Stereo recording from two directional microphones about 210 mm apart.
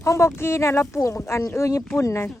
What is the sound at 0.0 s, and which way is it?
Speech, 15° left (ahead or behind).